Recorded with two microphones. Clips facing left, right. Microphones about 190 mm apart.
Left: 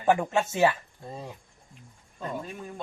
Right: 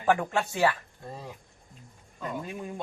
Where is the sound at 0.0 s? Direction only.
20° left (ahead or behind).